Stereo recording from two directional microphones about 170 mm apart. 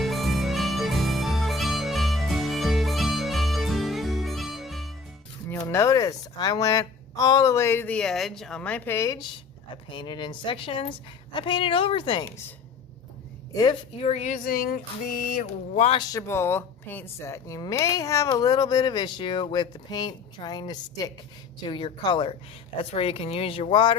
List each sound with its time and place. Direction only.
0.0 s music: centre (ahead or behind)
5.5 s a woman's voice: 15° left (ahead or behind)
13.5 s a woman's voice: 20° left (ahead or behind)
14.0 s speech: 40° left (ahead or behind)
15.9 s a woman's voice: 25° left (ahead or behind)
16.2 s a woman's voice: 15° left (ahead or behind); by 24.0 s 30° left (ahead or behind)